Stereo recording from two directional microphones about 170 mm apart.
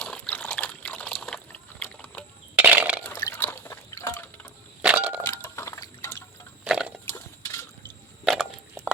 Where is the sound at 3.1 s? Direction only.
15° left (ahead or behind).